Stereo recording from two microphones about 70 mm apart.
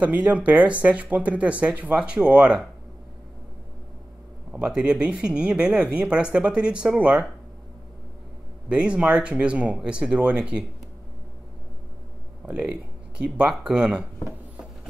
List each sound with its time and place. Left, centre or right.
0.0 s speech: right
4.5 s speech: centre
8.6 s speech: centre
12.4 s speech: centre